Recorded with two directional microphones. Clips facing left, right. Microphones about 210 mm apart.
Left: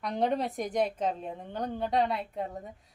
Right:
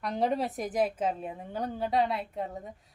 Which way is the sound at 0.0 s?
Centre (ahead or behind).